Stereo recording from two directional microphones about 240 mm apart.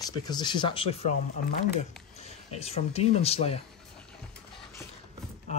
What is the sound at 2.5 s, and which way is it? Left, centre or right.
Speech, left.